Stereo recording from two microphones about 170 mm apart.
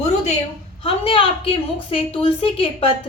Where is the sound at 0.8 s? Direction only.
30° left (ahead or behind).